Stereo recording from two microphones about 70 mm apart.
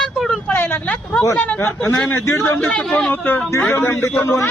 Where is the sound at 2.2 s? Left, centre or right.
Left.